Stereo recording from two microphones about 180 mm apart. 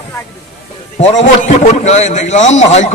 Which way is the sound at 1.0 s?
40° left (ahead or behind).